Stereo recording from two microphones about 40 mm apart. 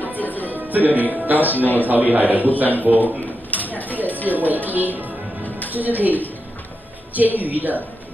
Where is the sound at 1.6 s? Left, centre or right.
Left.